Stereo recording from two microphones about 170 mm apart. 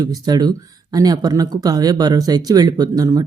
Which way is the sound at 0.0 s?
20° right (ahead or behind).